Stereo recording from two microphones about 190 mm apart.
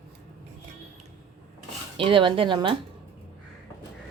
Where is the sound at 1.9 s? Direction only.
25° right (ahead or behind).